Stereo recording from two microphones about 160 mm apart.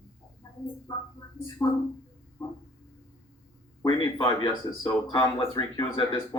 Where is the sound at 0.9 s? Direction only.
25° left (ahead or behind).